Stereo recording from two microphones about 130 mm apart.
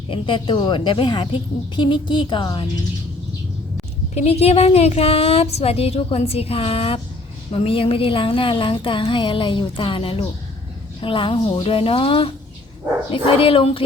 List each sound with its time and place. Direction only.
0.1 s a woman's voice: 40° left (ahead or behind)
4.1 s a woman's voice: 55° left (ahead or behind)